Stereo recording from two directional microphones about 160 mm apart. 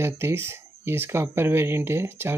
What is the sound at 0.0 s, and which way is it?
Speech, 15° right (ahead or behind).